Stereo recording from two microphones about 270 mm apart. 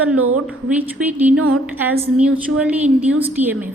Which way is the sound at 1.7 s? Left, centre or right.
Centre.